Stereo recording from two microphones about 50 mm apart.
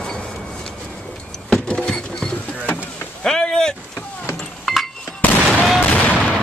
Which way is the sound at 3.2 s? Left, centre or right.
Centre.